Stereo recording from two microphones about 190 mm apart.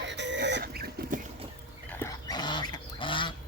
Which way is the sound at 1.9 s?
15° left (ahead or behind).